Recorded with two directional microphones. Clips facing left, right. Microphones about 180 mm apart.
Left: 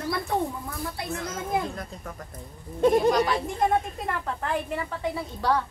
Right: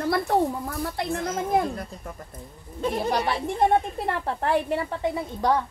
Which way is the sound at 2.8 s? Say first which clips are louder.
Left 7 dB; 55° left (ahead or behind).